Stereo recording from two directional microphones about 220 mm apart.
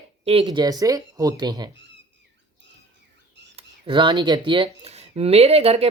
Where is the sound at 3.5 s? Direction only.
25° right (ahead or behind).